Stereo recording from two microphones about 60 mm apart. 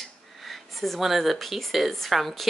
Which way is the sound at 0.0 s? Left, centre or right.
Centre.